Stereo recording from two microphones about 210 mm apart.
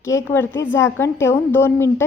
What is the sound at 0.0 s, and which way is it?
A woman's voice, 10° left (ahead or behind).